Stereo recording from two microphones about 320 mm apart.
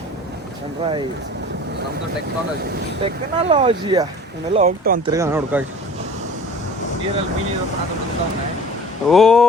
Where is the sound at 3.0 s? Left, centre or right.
Centre.